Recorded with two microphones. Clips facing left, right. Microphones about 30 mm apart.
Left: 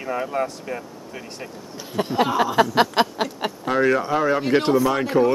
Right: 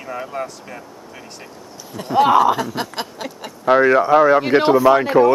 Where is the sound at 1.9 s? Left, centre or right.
Centre.